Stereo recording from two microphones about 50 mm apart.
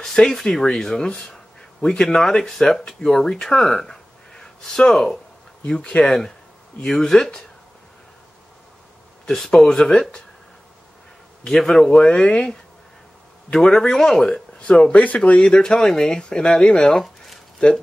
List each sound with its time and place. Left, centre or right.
0.0 s speech: centre
5.7 s speech: left
6.0 s speech: centre
9.2 s speech: centre
11.4 s speech: centre
14.9 s speech: left